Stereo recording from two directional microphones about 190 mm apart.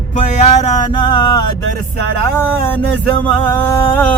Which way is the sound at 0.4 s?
30° left (ahead or behind).